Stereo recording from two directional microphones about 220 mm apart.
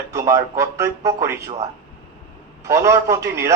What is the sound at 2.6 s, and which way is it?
Speech, 15° right (ahead or behind).